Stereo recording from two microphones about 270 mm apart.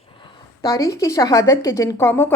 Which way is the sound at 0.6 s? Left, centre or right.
Centre.